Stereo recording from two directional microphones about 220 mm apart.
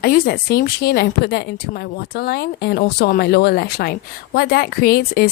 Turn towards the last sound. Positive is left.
turn(degrees=45)  # may be behind; listen again after turning